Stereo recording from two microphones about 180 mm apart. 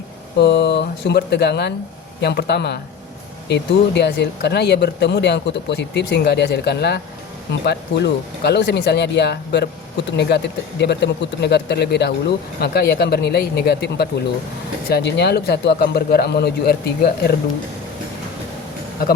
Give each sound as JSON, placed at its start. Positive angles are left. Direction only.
{"t": 0.3, "sound": "speech", "side_deg": 70}